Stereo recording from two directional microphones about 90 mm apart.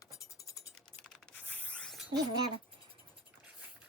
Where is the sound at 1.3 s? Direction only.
15° left (ahead or behind).